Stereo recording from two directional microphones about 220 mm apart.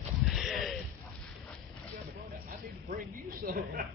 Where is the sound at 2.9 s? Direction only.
40° right (ahead or behind).